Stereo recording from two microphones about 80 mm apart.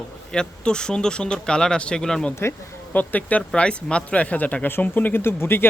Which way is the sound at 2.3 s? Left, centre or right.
Left.